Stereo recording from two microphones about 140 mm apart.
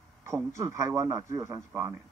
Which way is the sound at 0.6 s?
20° right (ahead or behind).